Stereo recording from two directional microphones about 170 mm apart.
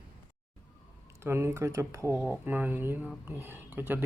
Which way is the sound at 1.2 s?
15° right (ahead or behind).